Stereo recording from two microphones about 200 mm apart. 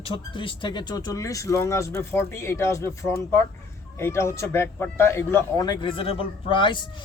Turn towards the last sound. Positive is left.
turn(degrees=25)  # may be behind; listen again after turning